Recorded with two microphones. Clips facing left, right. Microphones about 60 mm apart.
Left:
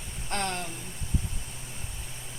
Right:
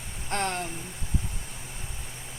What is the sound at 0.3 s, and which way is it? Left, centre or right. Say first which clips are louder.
Speech: right 2 dB; centre.